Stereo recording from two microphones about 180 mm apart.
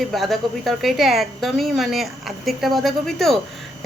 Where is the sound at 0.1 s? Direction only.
Centre (ahead or behind).